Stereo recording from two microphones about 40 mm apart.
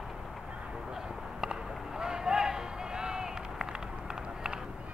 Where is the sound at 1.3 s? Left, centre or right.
Centre.